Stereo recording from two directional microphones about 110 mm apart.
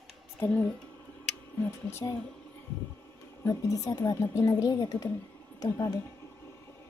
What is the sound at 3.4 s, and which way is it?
Speech, 30° left (ahead or behind).